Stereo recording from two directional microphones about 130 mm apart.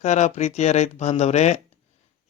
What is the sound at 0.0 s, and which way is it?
Speech, 60° left (ahead or behind).